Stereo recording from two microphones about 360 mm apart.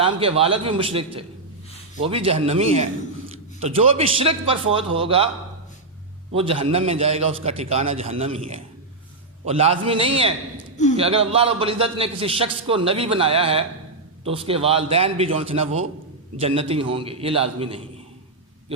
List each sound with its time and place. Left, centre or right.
0.0 s a man's voice: centre
6.3 s a man's voice: centre